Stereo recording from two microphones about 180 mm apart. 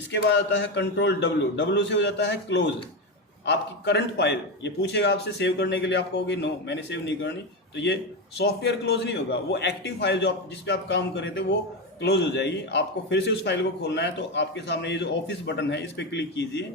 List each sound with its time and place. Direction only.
0.1 s a man's voice: 80° left
8.4 s a man's voice: 65° left (ahead or behind)